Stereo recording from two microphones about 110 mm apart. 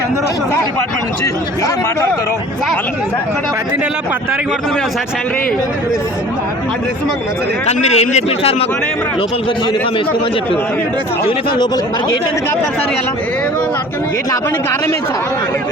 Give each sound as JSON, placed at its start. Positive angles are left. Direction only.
{"t": 7.7, "sound": "a man's voice", "side_deg": 85}
{"t": 11.3, "sound": "speech", "side_deg": 45}